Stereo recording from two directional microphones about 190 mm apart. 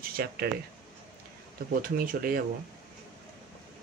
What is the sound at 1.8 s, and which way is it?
Speech, 50° right (ahead or behind).